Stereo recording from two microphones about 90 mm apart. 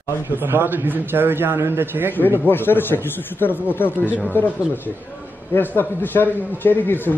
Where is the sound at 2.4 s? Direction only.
25° left (ahead or behind).